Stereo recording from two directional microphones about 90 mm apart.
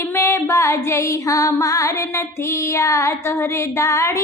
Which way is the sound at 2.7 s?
35° left (ahead or behind).